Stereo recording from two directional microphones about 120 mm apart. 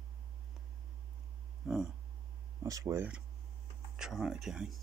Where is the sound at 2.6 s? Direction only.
25° right (ahead or behind).